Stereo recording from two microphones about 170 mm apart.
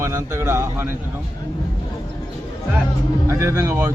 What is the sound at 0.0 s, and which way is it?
Speech, 15° right (ahead or behind).